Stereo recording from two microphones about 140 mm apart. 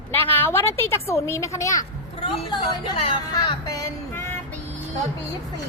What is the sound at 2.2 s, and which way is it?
Speech, 40° left (ahead or behind).